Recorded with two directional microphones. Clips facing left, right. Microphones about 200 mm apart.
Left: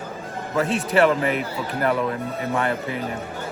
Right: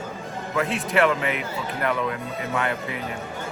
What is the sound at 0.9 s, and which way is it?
Speech, 35° left (ahead or behind).